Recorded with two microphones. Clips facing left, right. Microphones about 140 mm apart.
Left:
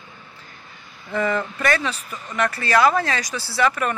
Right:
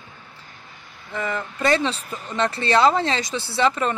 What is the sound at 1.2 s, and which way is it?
Speech, 20° right (ahead or behind).